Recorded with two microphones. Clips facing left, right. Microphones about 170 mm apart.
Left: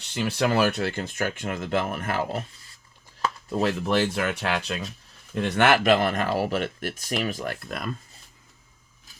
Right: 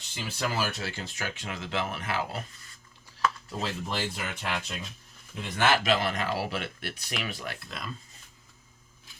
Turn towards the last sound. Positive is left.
turn(degrees=55)  # may be behind; listen again after turning